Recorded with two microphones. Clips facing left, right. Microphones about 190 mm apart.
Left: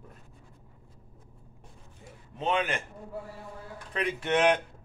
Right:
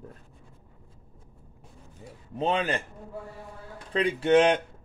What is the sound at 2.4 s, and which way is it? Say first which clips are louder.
Speech: right 2 dB; 35° right (ahead or behind).